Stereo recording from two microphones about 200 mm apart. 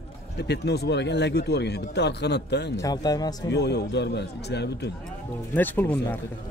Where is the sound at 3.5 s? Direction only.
55° left (ahead or behind).